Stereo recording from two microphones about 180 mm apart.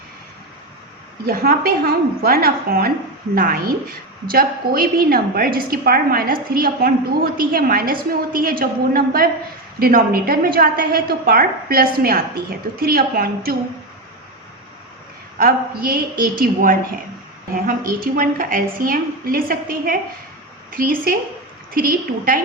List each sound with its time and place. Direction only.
1.2 s a woman's voice: 55° right (ahead or behind)
15.4 s a woman's voice: 60° right (ahead or behind)
17.5 s a woman's voice: 50° right (ahead or behind)